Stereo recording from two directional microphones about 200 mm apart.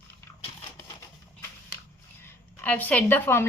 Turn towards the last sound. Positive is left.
turn(degrees=10)  # may be behind; listen again after turning